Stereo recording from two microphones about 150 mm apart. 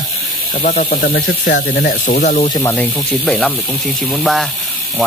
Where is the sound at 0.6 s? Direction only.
65° left (ahead or behind).